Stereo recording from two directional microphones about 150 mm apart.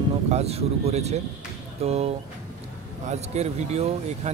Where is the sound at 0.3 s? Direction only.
45° right (ahead or behind).